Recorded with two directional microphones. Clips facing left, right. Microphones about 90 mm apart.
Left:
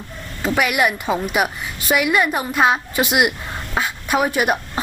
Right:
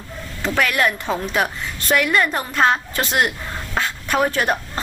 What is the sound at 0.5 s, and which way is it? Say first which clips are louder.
A woman's voice: left 1 dB; 15° left (ahead or behind).